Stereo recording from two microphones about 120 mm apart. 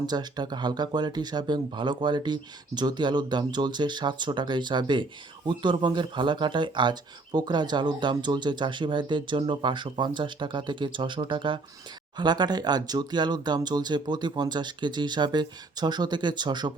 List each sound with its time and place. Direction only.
0.0 s speech: 35° right (ahead or behind)